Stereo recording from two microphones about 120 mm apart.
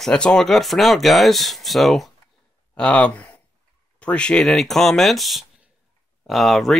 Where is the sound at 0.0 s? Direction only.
5° left (ahead or behind).